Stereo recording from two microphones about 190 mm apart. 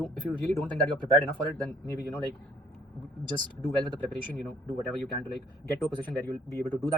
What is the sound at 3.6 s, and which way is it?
Speech, 5° left (ahead or behind).